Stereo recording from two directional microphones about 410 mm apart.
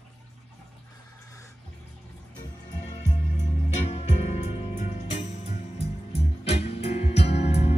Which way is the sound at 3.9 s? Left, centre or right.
Centre.